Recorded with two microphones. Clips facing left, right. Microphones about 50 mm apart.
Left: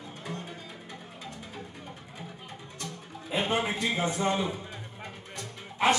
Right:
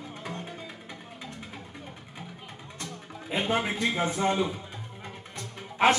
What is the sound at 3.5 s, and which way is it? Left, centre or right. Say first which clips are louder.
Speech: right 3 dB; centre.